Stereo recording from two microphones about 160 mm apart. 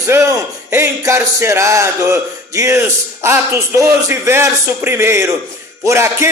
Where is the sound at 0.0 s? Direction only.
20° right (ahead or behind).